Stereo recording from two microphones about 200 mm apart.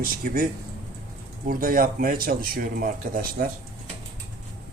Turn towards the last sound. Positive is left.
turn(degrees=-45)  # may be behind; listen again after turning